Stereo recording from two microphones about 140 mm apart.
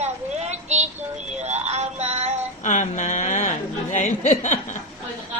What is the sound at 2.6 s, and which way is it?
A woman's voice, 65° left (ahead or behind).